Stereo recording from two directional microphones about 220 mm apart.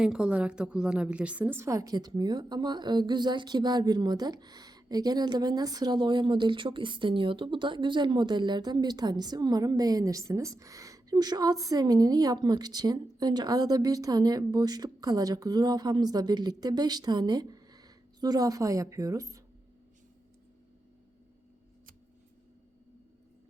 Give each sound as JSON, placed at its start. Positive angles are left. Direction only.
{"t": 0.0, "sound": "a woman's voice", "side_deg": -5}